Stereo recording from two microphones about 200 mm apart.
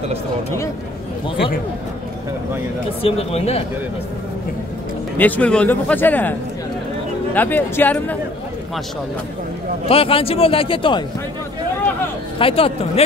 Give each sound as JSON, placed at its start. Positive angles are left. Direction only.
{"t": 3.0, "sound": "a man's voice", "side_deg": 30}
{"t": 5.1, "sound": "speech", "side_deg": 10}
{"t": 7.3, "sound": "speech", "side_deg": 10}
{"t": 9.8, "sound": "a man's voice", "side_deg": 30}
{"t": 12.4, "sound": "speech", "side_deg": 25}